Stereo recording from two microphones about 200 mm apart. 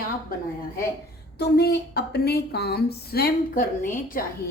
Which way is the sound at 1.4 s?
55° left (ahead or behind).